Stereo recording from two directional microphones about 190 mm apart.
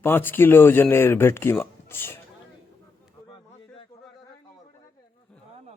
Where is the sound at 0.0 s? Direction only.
10° left (ahead or behind).